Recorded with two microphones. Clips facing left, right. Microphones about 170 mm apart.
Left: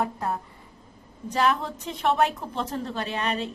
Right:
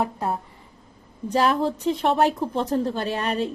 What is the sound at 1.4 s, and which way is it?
A woman's voice, 35° right (ahead or behind).